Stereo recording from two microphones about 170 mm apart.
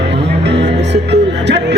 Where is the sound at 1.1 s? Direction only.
90° right.